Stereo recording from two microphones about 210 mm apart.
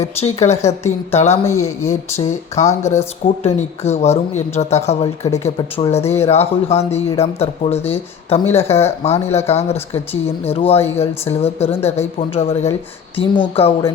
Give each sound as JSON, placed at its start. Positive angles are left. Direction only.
{"t": 0.2, "sound": "speech", "side_deg": 30}
{"t": 2.8, "sound": "speech", "side_deg": 15}
{"t": 3.4, "sound": "speech", "side_deg": 30}